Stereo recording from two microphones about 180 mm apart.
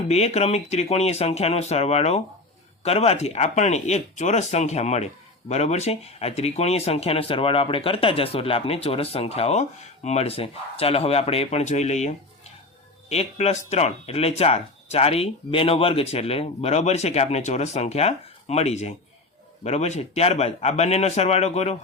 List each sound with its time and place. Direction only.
0.1 s speech: 35° left (ahead or behind)